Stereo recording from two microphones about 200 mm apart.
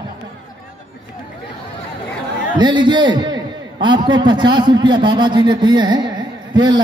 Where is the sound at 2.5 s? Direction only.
20° right (ahead or behind).